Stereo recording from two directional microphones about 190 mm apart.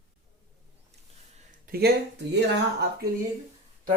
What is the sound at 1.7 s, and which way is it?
Speech, 55° right (ahead or behind).